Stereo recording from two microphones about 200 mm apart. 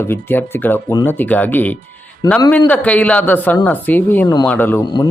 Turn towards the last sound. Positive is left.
turn(degrees=20)  # may be behind; listen again after turning